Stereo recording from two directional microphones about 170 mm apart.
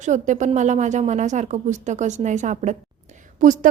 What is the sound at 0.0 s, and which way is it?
Speech, 45° right (ahead or behind).